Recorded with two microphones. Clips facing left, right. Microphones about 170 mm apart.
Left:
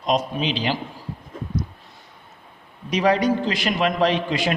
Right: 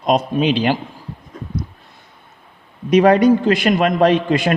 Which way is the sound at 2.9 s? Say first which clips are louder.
Right 8 dB; 55° right (ahead or behind).